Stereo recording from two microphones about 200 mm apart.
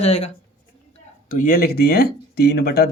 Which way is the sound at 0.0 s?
35° left (ahead or behind).